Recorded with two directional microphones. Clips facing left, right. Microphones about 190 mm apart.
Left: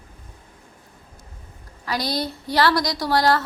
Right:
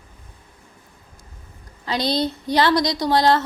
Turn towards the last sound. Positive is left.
turn(degrees=-20)  # may be behind; listen again after turning